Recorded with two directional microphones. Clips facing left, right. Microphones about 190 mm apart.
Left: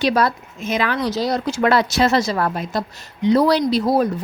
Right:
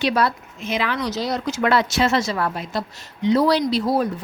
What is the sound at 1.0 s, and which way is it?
A woman's voice, 35° left (ahead or behind).